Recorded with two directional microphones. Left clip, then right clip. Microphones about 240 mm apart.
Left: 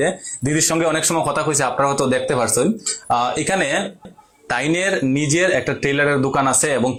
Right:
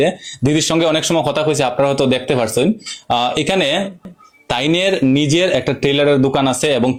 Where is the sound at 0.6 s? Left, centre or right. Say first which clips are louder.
Right 2 dB; right.